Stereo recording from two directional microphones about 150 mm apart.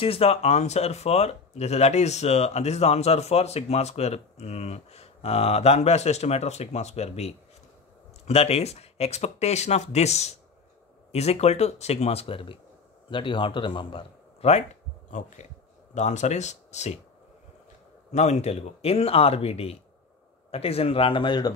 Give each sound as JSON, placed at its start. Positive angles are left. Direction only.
{"t": 0.0, "sound": "speech", "side_deg": 40}
{"t": 15.0, "sound": "speech", "side_deg": 55}
{"t": 18.1, "sound": "speech", "side_deg": 50}